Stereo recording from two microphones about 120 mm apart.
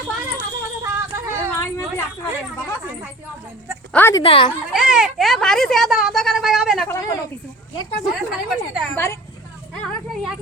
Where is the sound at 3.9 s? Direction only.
15° left (ahead or behind).